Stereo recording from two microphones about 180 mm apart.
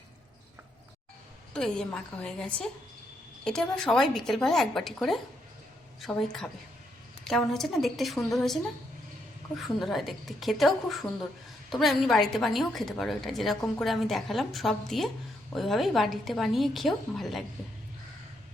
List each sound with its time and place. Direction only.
1.5 s a woman's voice: 5° left (ahead or behind)
9.6 s a woman's voice: centre (ahead or behind)